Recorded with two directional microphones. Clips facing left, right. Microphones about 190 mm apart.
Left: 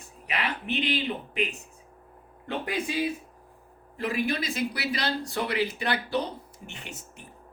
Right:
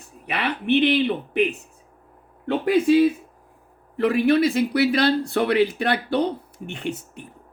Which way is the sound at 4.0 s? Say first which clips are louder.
Right 11 dB; 60° right (ahead or behind).